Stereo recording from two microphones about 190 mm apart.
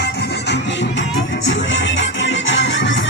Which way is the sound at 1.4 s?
75° left (ahead or behind).